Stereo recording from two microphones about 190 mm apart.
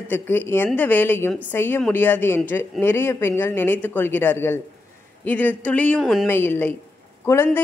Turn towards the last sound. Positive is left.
turn(degrees=10)  # may be behind; listen again after turning